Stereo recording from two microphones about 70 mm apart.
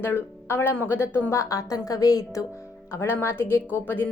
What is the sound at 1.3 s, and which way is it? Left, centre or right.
A woman's voice, left.